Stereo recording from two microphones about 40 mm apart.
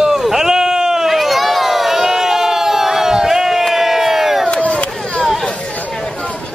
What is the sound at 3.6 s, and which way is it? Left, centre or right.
Crowd, centre.